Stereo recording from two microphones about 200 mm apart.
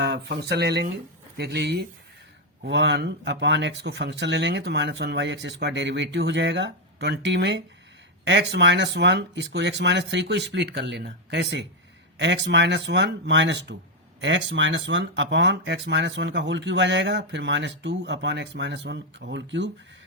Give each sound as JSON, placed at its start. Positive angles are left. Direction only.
{"t": 0.0, "sound": "speech", "side_deg": -60}